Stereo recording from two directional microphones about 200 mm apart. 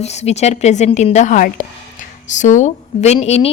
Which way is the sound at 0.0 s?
35° left (ahead or behind).